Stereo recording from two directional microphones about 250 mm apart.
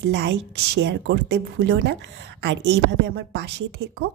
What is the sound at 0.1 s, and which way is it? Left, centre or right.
A woman's voice, right.